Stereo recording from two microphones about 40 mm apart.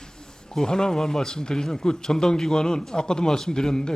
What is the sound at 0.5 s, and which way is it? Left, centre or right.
Speech, centre.